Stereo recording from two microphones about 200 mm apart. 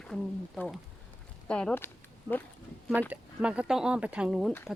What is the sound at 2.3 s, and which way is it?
Speech, 15° right (ahead or behind).